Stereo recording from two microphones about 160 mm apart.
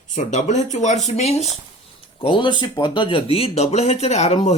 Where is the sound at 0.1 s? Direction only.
45° left (ahead or behind).